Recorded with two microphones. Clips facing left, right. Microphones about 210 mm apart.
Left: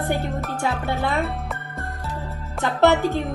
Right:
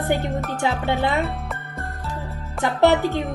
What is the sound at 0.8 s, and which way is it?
Music, 20° right (ahead or behind).